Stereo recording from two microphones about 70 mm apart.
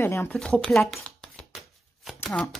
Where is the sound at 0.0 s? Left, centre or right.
Left.